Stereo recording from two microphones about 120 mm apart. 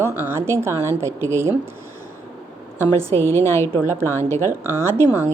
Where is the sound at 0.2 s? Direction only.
20° right (ahead or behind).